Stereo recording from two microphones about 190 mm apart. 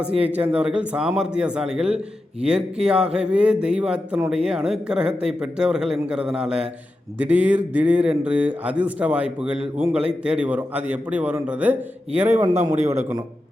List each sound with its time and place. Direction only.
0.2 s a man's voice: 10° right (ahead or behind)
12.5 s a man's voice: 35° right (ahead or behind)